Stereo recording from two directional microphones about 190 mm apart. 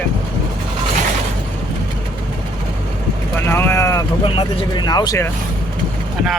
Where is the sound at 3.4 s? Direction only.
10° left (ahead or behind).